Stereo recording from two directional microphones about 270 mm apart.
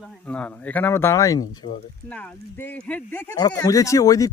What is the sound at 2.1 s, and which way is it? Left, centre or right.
Speech, centre.